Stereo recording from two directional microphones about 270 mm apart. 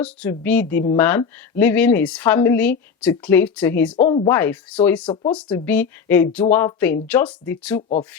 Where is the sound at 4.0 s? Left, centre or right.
Left.